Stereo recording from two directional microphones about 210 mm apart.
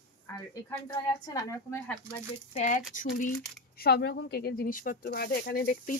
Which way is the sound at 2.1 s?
35° left (ahead or behind).